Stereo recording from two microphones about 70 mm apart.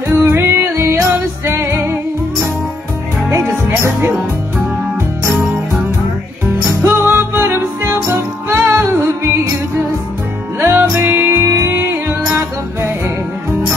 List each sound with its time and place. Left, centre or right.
0.2 s music: right
3.3 s music: right
6.8 s music: right
10.6 s music: right